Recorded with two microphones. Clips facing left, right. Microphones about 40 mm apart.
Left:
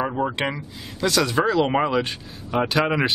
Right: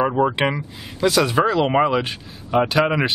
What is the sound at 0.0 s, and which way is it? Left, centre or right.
Speech, right.